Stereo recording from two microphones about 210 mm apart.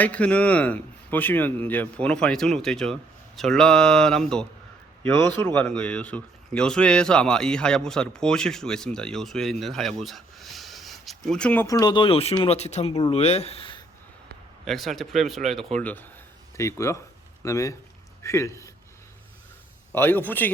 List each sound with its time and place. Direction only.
0.0 s a man's voice: 5° left (ahead or behind)
11.6 s speech: 15° left (ahead or behind)
14.6 s a man's voice: centre (ahead or behind)
19.9 s a man's voice: 10° left (ahead or behind)